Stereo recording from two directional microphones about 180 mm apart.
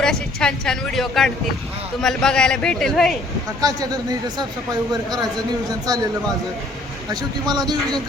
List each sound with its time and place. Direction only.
0.0 s a woman's voice: 5° left (ahead or behind)
3.6 s speech: 20° right (ahead or behind)
7.1 s speech: 20° right (ahead or behind)